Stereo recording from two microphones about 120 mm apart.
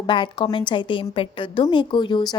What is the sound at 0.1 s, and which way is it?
A woman's voice, 45° left (ahead or behind).